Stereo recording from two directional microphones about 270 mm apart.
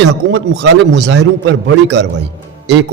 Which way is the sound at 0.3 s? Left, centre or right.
Right.